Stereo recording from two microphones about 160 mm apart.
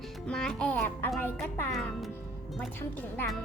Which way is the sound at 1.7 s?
Centre (ahead or behind).